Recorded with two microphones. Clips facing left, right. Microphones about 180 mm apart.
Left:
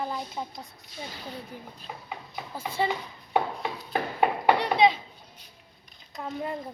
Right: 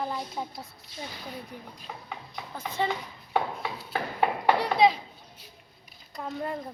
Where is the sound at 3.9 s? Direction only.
20° left (ahead or behind).